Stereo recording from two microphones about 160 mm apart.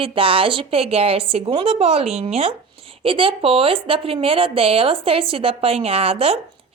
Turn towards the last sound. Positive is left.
turn(degrees=-35)  # may be behind; listen again after turning